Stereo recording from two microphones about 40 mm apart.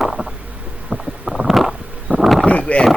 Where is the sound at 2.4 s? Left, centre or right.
Left.